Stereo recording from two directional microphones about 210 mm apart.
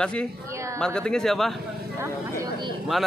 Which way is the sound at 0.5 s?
15° right (ahead or behind).